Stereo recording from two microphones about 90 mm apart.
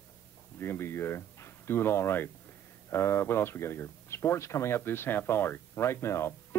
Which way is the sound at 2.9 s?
30° left (ahead or behind).